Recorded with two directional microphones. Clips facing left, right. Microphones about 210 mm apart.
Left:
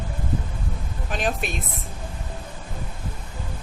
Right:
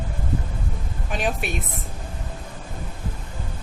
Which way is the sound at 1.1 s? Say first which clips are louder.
Even; 10° right (ahead or behind).